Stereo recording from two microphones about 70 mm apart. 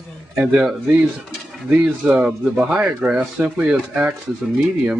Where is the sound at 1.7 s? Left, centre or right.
Centre.